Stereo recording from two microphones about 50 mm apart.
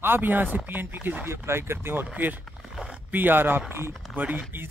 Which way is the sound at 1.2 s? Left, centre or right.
Right.